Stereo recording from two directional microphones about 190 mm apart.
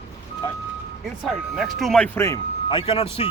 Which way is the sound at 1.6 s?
Centre (ahead or behind).